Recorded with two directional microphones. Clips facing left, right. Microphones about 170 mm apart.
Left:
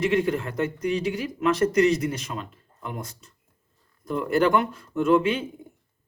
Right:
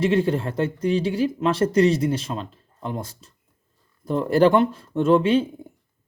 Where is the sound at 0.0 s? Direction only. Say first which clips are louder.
Right 3 dB; 30° right (ahead or behind).